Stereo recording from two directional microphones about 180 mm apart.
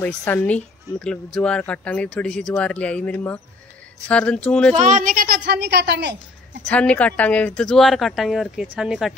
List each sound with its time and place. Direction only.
0.0 s speech: 10° left (ahead or behind)
4.7 s a woman's voice: 45° right (ahead or behind); by 6.6 s 75° right (ahead or behind)
6.6 s speech: 5° left (ahead or behind)